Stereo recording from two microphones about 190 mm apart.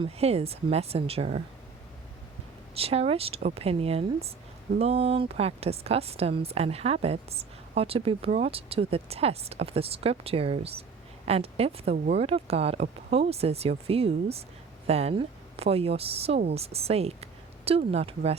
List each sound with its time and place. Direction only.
0.0 s a woman's voice: 30° right (ahead or behind)
2.7 s a woman's voice: 30° right (ahead or behind)